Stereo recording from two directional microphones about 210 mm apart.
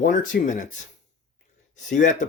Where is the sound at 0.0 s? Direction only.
45° left (ahead or behind).